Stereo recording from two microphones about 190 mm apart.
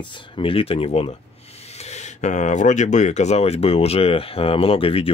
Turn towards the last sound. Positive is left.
turn(degrees=30)  # may be behind; listen again after turning